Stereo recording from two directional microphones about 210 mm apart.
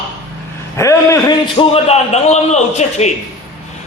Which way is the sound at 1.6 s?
30° left (ahead or behind).